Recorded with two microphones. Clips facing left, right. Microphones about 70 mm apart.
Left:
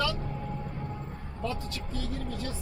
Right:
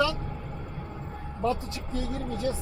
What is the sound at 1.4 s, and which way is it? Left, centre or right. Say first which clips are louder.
Speech: right 6 dB; right.